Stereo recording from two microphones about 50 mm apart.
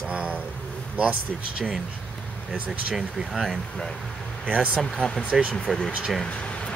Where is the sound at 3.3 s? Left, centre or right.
Centre.